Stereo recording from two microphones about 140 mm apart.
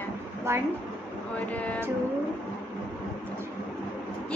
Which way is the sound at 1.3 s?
10° left (ahead or behind).